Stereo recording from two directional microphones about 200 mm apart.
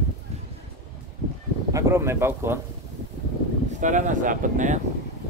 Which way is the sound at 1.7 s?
15° right (ahead or behind).